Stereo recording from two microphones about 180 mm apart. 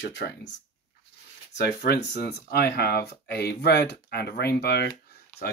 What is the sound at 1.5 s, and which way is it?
Speech, 65° left (ahead or behind).